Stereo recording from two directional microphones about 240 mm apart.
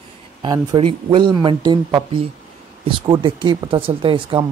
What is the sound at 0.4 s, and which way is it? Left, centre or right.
Speech, centre.